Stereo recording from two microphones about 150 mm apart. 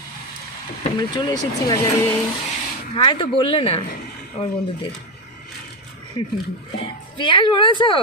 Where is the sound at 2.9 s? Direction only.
35° left (ahead or behind).